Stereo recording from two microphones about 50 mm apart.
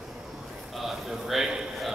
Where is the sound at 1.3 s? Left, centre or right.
Centre.